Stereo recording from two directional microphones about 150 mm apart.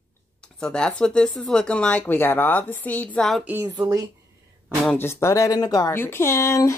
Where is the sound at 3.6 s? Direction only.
25° right (ahead or behind).